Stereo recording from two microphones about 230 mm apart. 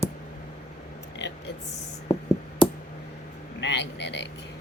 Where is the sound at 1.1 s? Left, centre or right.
Left.